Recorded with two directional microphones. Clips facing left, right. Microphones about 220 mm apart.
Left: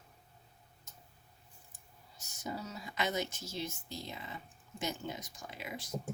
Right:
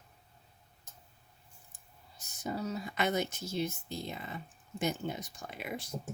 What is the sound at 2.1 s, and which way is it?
Speech, 55° right (ahead or behind).